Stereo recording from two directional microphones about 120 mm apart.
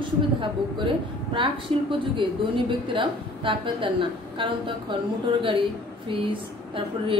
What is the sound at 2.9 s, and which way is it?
A woman's voice, 45° right (ahead or behind).